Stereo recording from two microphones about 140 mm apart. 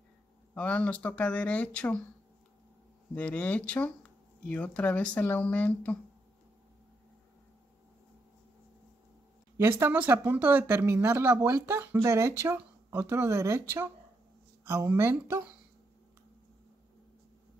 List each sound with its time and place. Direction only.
0.6 s speech: 10° left (ahead or behind)
3.2 s speech: 10° left (ahead or behind)
9.6 s speech: 20° right (ahead or behind)